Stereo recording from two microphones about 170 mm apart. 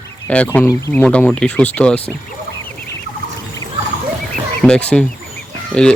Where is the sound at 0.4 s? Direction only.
15° left (ahead or behind).